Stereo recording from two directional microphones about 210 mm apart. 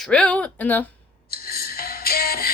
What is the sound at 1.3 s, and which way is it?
Music, 45° left (ahead or behind).